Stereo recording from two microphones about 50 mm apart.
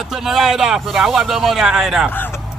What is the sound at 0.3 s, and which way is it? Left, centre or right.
Speech, centre.